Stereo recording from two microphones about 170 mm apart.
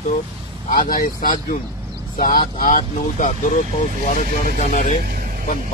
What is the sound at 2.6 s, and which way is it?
Speech, 50° left (ahead or behind).